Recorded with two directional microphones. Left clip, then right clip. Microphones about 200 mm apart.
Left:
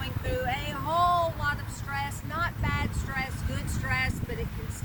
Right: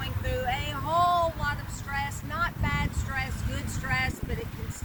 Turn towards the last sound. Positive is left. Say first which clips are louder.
# even
turn(degrees=10)  # may be behind; listen again after turning